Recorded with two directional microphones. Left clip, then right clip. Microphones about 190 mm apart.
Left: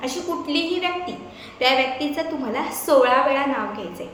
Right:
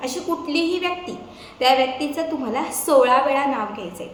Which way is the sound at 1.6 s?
15° right (ahead or behind).